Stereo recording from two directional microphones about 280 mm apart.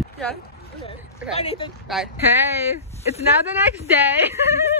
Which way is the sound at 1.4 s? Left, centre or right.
Left.